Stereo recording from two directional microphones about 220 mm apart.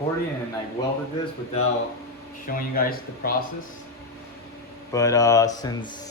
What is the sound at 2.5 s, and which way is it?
Speech, 40° left (ahead or behind).